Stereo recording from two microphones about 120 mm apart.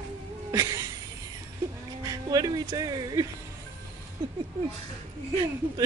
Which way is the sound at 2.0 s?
30° right (ahead or behind).